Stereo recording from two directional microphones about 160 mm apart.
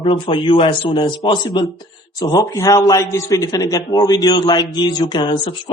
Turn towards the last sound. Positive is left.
turn(degrees=30)  # may be behind; listen again after turning